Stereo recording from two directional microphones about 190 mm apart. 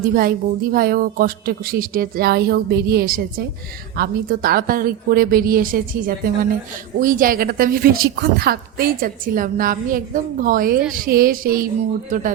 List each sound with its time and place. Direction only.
0.1 s a woman's voice: 50° right (ahead or behind)